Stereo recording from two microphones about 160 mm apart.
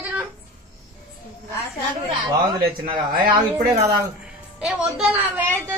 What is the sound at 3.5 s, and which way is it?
Speech, 20° right (ahead or behind).